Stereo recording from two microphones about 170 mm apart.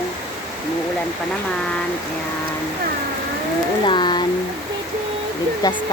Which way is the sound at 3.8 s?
25° left (ahead or behind).